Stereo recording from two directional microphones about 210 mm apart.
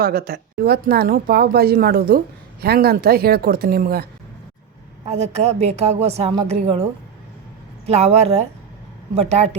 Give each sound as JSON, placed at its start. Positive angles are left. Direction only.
{"t": 0.0, "sound": "speech", "side_deg": -45}
{"t": 5.0, "sound": "a woman's voice", "side_deg": -30}
{"t": 7.9, "sound": "a woman's voice", "side_deg": -30}